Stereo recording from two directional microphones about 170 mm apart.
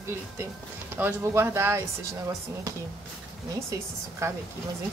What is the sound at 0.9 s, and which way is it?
Speech, 15° right (ahead or behind).